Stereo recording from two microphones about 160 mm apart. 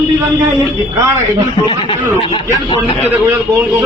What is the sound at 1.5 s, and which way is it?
Speech, 35° left (ahead or behind).